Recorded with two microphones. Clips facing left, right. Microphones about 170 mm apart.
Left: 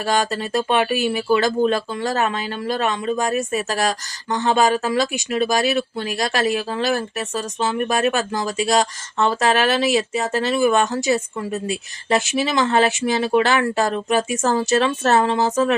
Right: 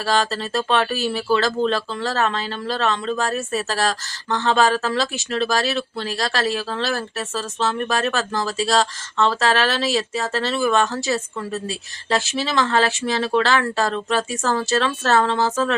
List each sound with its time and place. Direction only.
0.0 s speech: 15° left (ahead or behind)